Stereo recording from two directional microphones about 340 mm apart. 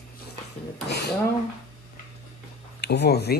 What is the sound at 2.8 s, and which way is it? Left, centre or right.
Speech, left.